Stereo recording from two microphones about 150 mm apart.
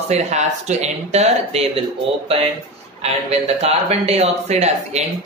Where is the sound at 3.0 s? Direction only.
45° right (ahead or behind).